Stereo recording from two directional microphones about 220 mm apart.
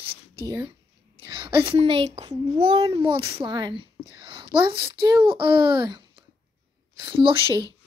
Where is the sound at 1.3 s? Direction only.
20° right (ahead or behind).